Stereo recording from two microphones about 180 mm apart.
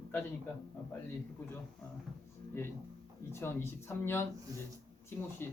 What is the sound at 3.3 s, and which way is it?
A man's voice, 15° left (ahead or behind).